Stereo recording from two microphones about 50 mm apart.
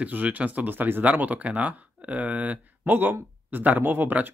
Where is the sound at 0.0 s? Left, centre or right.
Right.